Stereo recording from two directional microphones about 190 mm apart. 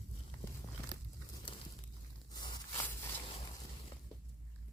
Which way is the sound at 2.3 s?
20° left (ahead or behind).